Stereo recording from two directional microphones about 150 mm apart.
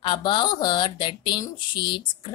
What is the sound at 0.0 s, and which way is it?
Speech, 30° left (ahead or behind).